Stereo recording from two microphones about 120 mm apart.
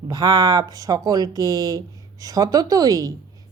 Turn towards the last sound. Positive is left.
turn(degrees=-30)  # may be behind; listen again after turning